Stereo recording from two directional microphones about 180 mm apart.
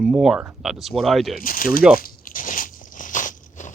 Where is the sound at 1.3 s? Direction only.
50° left (ahead or behind).